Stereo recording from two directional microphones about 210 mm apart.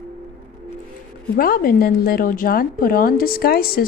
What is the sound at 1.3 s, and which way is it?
A woman's voice, 45° left (ahead or behind).